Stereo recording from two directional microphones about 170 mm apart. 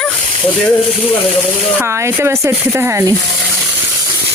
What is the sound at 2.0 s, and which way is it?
Speech, 15° right (ahead or behind).